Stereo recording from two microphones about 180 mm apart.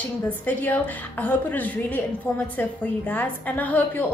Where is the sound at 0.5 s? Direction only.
10° left (ahead or behind).